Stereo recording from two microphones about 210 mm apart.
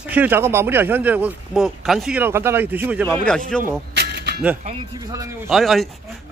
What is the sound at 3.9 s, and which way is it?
Music, 50° right (ahead or behind).